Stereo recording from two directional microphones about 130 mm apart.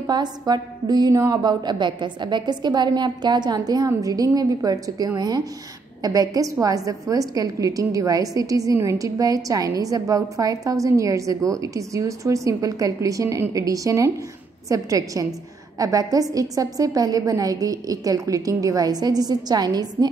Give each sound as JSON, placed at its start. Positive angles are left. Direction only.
{"t": 0.0, "sound": "a woman's voice", "side_deg": -30}